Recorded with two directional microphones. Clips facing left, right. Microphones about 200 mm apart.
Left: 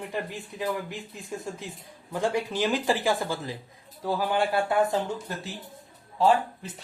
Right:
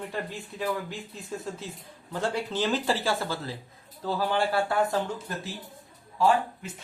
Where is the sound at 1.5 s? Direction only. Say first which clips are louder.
Even; 15° left (ahead or behind).